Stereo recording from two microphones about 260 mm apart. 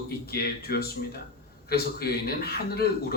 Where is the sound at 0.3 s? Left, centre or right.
Left.